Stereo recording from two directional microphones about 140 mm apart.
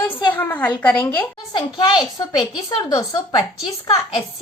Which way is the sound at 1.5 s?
35° left (ahead or behind).